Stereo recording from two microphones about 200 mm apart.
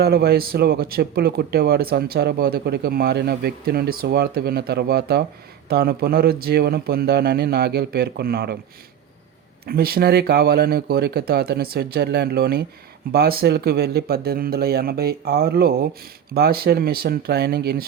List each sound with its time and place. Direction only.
0.0 s speech: 50° right (ahead or behind)
9.6 s speech: 50° right (ahead or behind)